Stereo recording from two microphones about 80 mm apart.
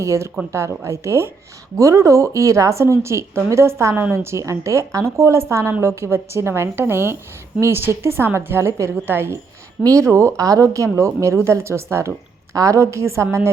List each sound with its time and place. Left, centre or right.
0.0 s speech: right
9.8 s speech: right